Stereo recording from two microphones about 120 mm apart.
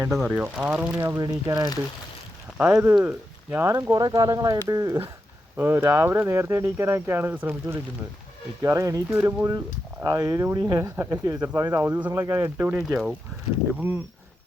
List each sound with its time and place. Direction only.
0.1 s speech: 10° right (ahead or behind)
0.9 s speech: 25° right (ahead or behind)
2.6 s speech: 15° right (ahead or behind)
5.5 s speech: 15° right (ahead or behind)
12.9 s speech: 5° right (ahead or behind)
13.7 s speech: 15° right (ahead or behind)